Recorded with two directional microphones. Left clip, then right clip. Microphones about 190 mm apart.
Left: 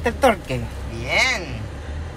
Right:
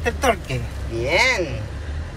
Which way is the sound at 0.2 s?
55° left (ahead or behind).